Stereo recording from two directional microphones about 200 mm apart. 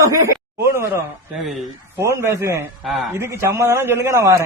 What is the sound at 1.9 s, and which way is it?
A man's voice, 15° right (ahead or behind).